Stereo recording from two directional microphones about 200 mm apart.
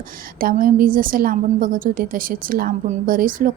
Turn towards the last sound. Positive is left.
turn(degrees=-45)  # may be behind; listen again after turning